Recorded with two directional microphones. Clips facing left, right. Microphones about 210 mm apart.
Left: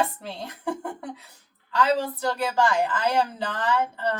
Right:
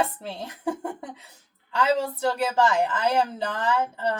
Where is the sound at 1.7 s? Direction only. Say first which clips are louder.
Even; 25° right (ahead or behind).